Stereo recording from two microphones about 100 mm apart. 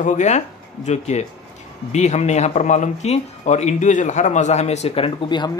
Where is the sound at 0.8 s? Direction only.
90° left; by 5.3 s 70° left (ahead or behind).